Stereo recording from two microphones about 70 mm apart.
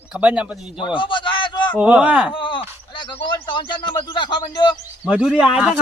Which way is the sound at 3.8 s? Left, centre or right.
Left.